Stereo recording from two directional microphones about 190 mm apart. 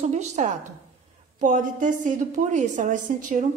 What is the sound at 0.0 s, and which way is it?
Speech, 35° right (ahead or behind).